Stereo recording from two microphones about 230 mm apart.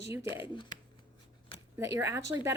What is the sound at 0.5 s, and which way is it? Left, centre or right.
Speech, left.